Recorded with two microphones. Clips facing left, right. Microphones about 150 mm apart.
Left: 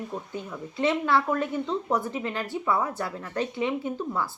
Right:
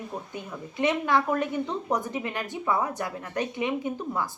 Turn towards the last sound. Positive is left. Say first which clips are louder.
# even
turn(degrees=-15)  # may be behind; listen again after turning